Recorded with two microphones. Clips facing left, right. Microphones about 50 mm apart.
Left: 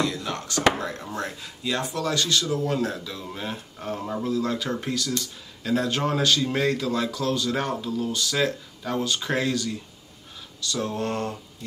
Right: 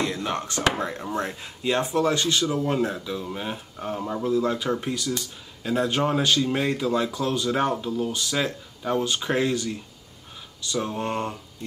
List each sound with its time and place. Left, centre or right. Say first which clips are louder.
0.0 s speech: right 1 dB; right